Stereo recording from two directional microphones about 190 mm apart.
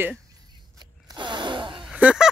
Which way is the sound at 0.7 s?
25° right (ahead or behind).